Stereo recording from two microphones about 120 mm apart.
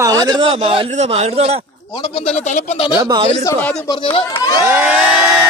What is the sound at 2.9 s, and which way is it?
Speech, 35° right (ahead or behind).